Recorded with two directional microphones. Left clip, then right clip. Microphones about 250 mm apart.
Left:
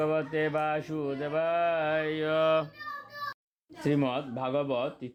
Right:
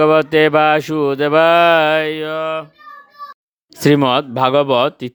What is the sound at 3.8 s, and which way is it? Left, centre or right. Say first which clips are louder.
Speech: right 16 dB; right.